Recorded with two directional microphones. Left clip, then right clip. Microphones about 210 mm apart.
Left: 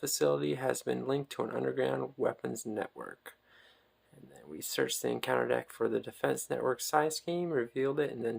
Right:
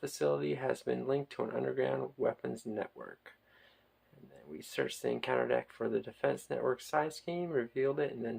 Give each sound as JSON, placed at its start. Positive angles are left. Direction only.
{"t": 0.0, "sound": "speech", "side_deg": 25}
{"t": 4.5, "sound": "speech", "side_deg": 25}